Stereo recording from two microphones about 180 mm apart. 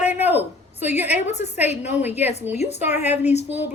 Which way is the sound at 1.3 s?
35° left (ahead or behind).